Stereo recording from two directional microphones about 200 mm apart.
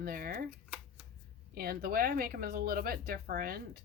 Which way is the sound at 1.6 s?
50° right (ahead or behind).